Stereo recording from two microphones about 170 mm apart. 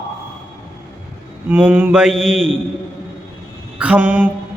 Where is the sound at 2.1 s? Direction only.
40° left (ahead or behind).